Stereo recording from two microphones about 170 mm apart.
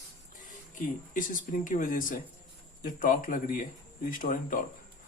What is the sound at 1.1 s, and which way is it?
Speech, 50° left (ahead or behind).